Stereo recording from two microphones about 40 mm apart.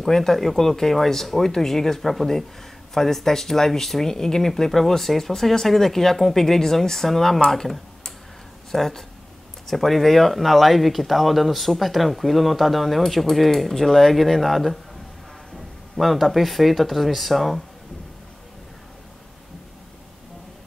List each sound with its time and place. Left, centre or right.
0.0 s speech: centre